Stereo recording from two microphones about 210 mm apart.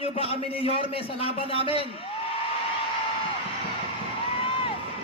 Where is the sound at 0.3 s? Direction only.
25° left (ahead or behind).